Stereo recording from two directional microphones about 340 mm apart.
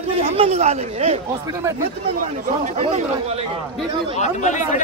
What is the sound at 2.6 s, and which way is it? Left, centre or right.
Speech, centre.